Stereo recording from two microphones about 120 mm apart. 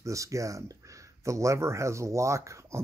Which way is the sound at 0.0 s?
25° right (ahead or behind).